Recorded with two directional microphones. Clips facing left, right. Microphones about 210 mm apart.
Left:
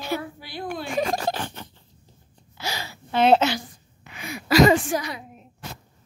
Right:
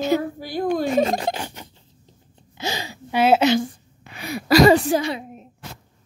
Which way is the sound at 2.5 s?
20° right (ahead or behind).